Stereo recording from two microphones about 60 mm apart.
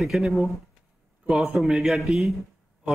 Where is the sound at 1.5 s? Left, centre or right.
Centre.